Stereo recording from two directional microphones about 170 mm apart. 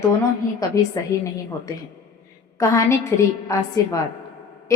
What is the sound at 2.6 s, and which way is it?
A woman's voice, 15° left (ahead or behind).